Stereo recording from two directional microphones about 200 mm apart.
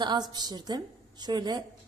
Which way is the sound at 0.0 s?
20° right (ahead or behind).